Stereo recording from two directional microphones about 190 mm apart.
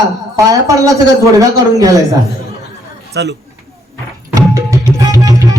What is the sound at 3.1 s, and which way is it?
Speech, 65° right (ahead or behind).